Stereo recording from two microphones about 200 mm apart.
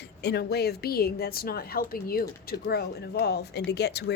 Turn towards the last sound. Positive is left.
turn(degrees=55)  # may be behind; listen again after turning